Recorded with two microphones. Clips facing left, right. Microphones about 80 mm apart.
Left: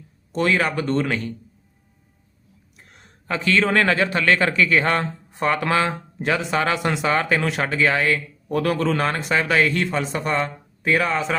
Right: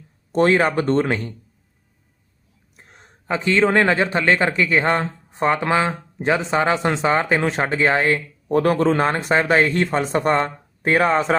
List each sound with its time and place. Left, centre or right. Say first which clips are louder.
0.3 s speech: right 4 dB; right
2.7 s a man's voice: right 2 dB; right